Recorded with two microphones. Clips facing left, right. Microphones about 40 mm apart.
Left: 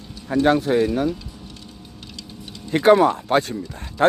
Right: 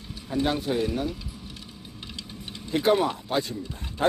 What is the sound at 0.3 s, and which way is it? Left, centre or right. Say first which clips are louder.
Speech: left 7 dB; left.